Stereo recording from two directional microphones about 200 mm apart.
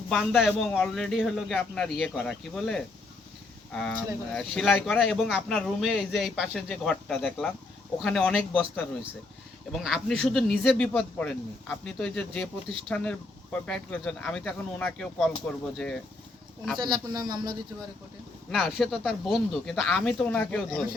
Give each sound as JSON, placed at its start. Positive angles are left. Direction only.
{"t": 0.1, "sound": "speech", "side_deg": 0}
{"t": 9.7, "sound": "speech", "side_deg": 0}
{"t": 16.7, "sound": "speech", "side_deg": -20}
{"t": 18.5, "sound": "speech", "side_deg": 0}